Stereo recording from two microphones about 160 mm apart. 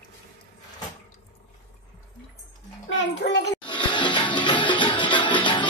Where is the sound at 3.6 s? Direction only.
30° left (ahead or behind).